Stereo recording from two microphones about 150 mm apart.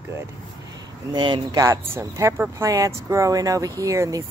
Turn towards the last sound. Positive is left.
turn(degrees=-20)  # may be behind; listen again after turning